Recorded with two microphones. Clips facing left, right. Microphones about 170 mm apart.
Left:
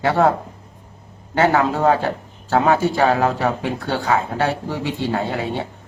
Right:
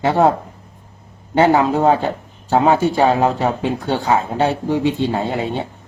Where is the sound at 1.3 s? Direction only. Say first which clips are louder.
Right 3 dB; 20° right (ahead or behind).